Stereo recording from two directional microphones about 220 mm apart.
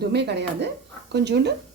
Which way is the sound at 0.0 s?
50° right (ahead or behind).